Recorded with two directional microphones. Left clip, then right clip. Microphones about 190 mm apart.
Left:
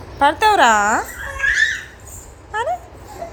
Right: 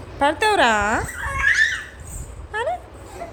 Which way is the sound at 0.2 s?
10° right (ahead or behind).